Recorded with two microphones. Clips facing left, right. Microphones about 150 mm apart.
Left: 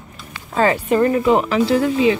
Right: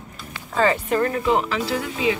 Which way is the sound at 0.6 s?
20° left (ahead or behind).